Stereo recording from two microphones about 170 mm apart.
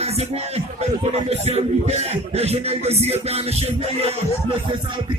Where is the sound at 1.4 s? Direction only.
40° right (ahead or behind).